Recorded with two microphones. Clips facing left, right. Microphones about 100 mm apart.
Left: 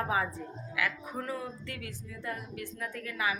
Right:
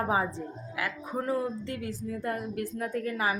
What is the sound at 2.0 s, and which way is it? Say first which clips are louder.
A woman's voice: right 7 dB; 45° right (ahead or behind).